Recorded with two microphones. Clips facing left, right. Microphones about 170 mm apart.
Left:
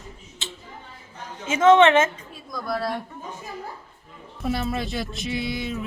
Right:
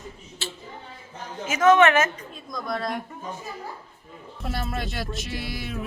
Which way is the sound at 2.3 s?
5° left (ahead or behind).